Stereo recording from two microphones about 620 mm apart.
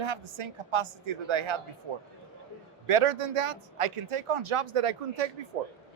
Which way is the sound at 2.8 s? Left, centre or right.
Right.